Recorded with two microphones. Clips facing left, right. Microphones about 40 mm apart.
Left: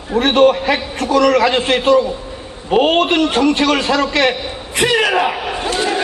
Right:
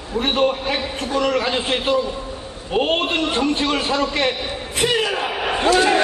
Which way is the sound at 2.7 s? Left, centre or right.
Left.